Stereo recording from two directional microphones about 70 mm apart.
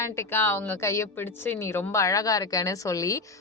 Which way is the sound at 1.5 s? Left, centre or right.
Left.